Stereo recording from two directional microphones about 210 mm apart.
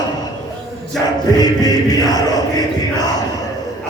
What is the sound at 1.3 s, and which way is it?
Music, 20° left (ahead or behind).